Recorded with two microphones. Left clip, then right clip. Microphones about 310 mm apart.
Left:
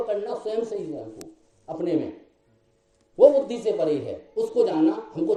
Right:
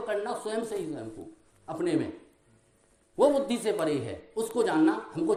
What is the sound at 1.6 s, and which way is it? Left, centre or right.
Speech, right.